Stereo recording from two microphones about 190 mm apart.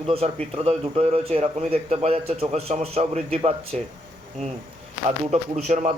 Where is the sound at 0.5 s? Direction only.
30° right (ahead or behind).